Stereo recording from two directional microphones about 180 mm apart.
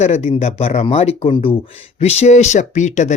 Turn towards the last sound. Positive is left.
turn(degrees=40)  # may be behind; listen again after turning